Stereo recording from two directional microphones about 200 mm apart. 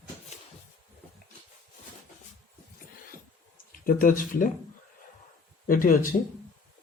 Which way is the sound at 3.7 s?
45° left (ahead or behind).